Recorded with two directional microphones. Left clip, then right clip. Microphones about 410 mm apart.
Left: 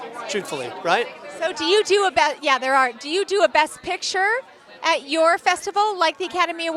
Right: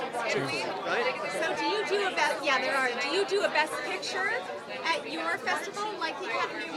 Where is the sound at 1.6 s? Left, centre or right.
Left.